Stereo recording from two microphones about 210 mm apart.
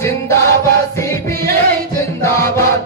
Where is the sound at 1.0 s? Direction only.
15° left (ahead or behind).